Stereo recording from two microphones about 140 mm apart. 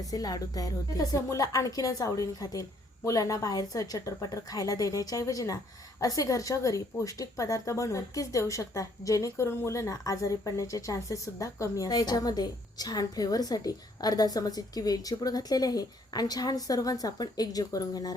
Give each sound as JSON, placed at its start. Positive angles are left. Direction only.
{"t": 0.1, "sound": "a woman's voice", "side_deg": 25}